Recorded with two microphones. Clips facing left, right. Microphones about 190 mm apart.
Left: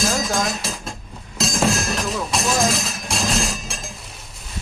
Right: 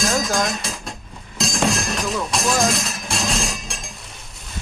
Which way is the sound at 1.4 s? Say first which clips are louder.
Left 1 dB; centre (ahead or behind).